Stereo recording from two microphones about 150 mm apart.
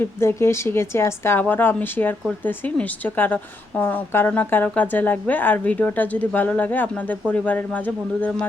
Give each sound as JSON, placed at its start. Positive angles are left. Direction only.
{"t": 0.0, "sound": "a woman's voice", "side_deg": 15}